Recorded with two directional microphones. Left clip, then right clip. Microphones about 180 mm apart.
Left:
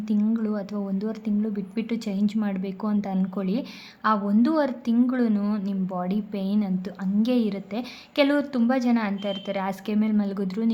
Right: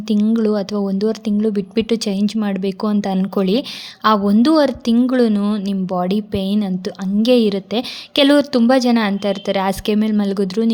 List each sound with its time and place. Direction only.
0.1 s a woman's voice: 40° right (ahead or behind)